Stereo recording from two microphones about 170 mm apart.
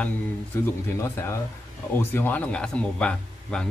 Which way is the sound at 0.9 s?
15° left (ahead or behind).